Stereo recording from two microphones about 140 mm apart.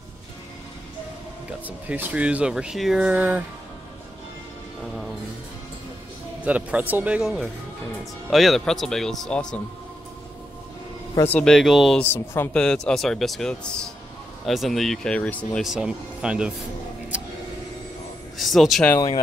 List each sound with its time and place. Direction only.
1.9 s speech: 10° right (ahead or behind)
6.4 s speech: 10° right (ahead or behind); by 9.6 s 5° left (ahead or behind)
11.2 s speech: 5° left (ahead or behind)
12.0 s speech: 15° left (ahead or behind)
15.6 s speech: 5° right (ahead or behind)
17.1 s music: 10° right (ahead or behind)
18.4 s speech: centre (ahead or behind)